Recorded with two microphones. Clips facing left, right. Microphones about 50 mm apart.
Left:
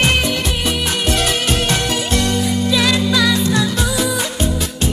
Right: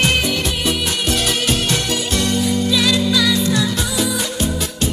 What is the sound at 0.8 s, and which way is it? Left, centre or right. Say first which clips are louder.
Music: left 2 dB; left.